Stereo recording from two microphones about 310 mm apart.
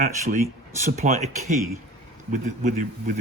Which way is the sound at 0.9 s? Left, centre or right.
Right.